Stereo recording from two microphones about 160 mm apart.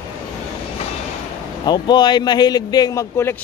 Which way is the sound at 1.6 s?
25° left (ahead or behind).